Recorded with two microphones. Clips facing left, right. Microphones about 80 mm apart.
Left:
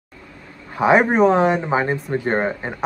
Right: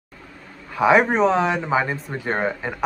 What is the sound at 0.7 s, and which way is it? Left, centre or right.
A man's voice, left.